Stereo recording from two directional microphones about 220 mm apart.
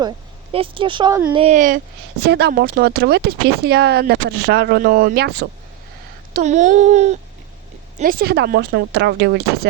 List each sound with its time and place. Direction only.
0.5 s speech: 25° right (ahead or behind)
2.2 s speech: 50° right (ahead or behind)
6.3 s speech: 30° right (ahead or behind); by 9.4 s 50° right (ahead or behind)